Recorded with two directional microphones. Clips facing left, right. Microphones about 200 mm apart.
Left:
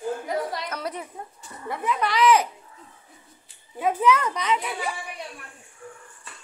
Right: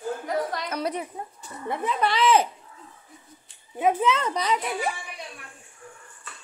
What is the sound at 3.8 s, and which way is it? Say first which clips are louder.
A child's voice: left 1 dB; 20° right (ahead or behind).